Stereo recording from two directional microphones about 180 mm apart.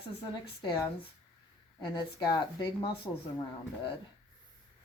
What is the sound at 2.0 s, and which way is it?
Speech, 25° left (ahead or behind).